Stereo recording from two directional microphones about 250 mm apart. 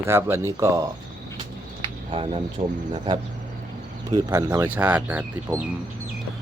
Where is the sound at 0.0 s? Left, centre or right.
Centre.